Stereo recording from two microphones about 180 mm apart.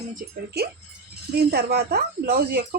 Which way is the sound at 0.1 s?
55° right (ahead or behind).